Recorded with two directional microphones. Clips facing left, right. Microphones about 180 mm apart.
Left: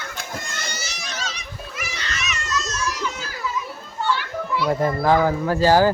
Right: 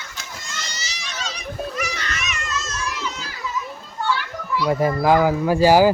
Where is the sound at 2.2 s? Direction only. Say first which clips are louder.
Left 1 dB; 40° left (ahead or behind).